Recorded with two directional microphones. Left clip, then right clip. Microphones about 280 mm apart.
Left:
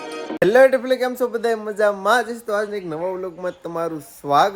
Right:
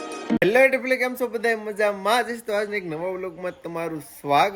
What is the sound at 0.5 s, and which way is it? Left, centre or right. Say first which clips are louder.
Speech: left 5 dB; centre.